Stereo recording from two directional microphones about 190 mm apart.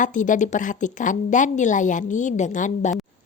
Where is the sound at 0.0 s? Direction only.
40° left (ahead or behind).